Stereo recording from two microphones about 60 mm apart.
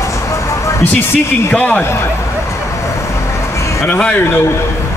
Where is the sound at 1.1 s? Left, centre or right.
Left.